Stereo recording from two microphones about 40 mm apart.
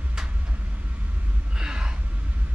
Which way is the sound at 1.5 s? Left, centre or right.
Right.